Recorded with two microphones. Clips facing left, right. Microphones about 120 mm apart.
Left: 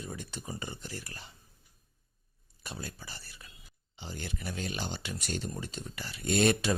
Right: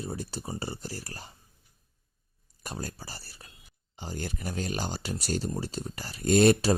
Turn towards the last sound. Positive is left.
turn(degrees=-35)  # may be behind; listen again after turning